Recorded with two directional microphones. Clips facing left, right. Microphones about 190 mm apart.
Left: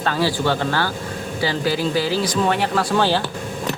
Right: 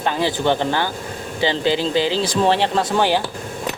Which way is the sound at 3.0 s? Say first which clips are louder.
Right 1 dB; 15° right (ahead or behind).